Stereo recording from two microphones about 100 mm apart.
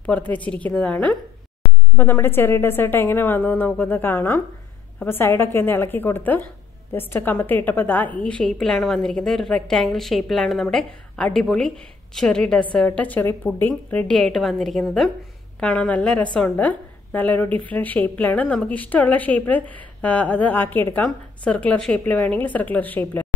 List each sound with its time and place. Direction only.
0.0 s a woman's voice: 15° left (ahead or behind)
15.6 s a woman's voice: 15° left (ahead or behind)